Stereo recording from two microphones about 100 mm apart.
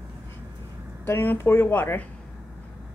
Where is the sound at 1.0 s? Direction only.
20° left (ahead or behind).